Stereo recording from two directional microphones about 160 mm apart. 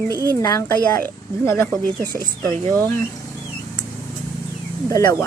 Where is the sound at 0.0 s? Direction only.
25° right (ahead or behind).